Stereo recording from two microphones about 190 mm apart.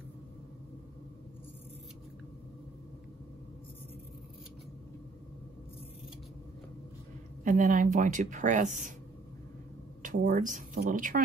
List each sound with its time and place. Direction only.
7.4 s speech: 45° right (ahead or behind)
10.0 s speech: 45° right (ahead or behind)